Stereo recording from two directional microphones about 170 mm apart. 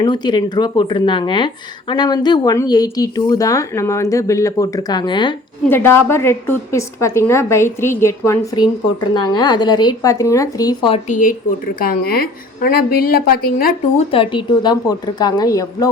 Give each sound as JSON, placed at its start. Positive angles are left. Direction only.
{"t": 0.0, "sound": "a woman's voice", "side_deg": 25}
{"t": 5.6, "sound": "a woman's voice", "side_deg": 15}
{"t": 10.9, "sound": "a woman's voice", "side_deg": 50}
{"t": 11.8, "sound": "a woman's voice", "side_deg": 65}
{"t": 14.1, "sound": "a woman's voice", "side_deg": 30}